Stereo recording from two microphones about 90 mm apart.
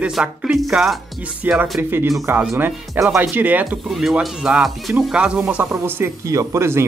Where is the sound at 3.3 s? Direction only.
20° right (ahead or behind).